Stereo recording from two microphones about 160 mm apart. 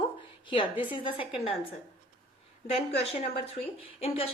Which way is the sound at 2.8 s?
40° left (ahead or behind).